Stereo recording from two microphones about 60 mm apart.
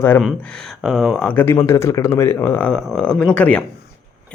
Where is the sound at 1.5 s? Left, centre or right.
Left.